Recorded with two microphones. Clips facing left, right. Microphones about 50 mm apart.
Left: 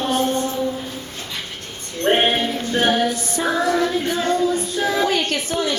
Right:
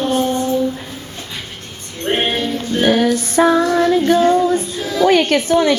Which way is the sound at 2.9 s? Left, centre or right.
Right.